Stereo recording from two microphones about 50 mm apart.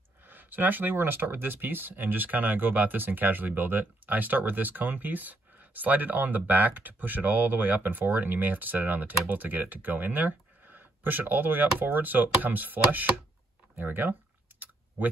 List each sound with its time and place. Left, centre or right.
0.3 s speech: right